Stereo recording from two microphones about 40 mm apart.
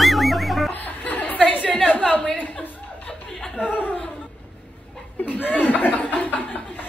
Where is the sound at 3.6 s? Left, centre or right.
Left.